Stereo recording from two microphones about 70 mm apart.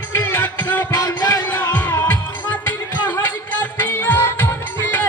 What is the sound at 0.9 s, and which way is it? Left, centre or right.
Music, left.